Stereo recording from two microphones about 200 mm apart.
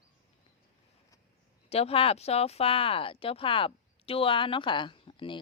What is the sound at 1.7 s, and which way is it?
Speech, 30° left (ahead or behind).